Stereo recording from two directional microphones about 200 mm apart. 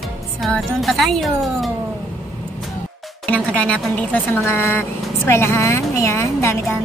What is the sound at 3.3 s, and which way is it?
Speech, 5° left (ahead or behind).